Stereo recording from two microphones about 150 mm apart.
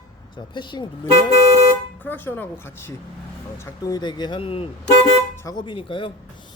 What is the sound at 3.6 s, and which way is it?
Speech, 25° left (ahead or behind).